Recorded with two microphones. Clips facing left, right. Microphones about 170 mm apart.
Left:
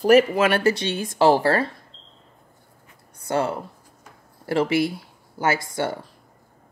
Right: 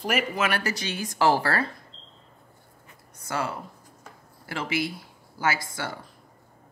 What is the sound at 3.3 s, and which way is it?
Speech, 30° left (ahead or behind).